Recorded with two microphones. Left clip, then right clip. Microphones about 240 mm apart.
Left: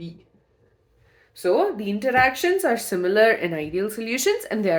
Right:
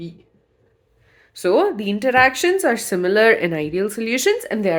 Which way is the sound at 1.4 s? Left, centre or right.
Right.